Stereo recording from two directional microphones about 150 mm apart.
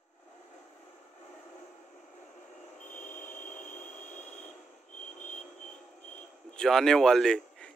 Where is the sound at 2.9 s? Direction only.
55° left (ahead or behind).